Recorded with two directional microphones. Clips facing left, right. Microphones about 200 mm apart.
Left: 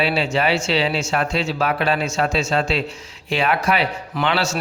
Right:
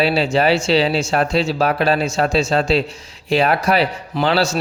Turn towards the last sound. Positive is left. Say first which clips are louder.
# right 4 dB
turn(degrees=-35)  # may be behind; listen again after turning